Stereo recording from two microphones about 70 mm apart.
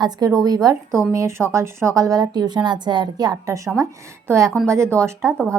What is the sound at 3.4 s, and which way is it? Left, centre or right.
A woman's voice, right.